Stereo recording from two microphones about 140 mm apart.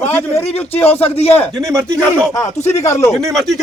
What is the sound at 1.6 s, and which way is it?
Speech, 20° right (ahead or behind).